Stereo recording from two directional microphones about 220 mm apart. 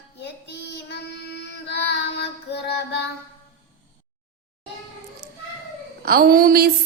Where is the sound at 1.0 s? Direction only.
50° left (ahead or behind).